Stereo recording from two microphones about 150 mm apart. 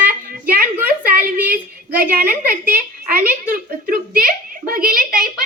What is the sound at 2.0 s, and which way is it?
A child's voice, 70° right (ahead or behind).